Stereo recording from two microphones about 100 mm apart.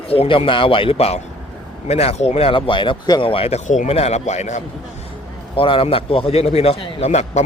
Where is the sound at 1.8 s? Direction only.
90° left; by 3.1 s 55° left (ahead or behind).